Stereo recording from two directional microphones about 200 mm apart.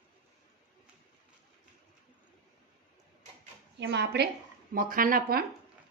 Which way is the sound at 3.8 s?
55° right (ahead or behind).